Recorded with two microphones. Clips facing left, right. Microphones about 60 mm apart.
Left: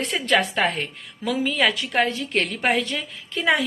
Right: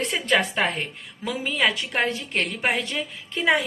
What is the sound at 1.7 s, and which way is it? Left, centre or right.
Speech, right.